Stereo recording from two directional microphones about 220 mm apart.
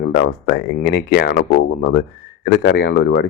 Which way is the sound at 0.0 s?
50° left (ahead or behind).